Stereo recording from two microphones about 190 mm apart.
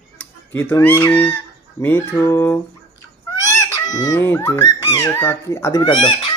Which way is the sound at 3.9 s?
20° left (ahead or behind).